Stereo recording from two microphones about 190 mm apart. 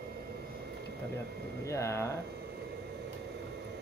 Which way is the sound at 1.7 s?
15° left (ahead or behind).